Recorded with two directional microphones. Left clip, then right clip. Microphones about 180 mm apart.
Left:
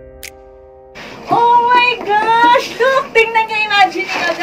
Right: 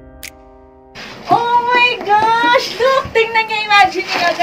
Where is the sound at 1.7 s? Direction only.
15° right (ahead or behind).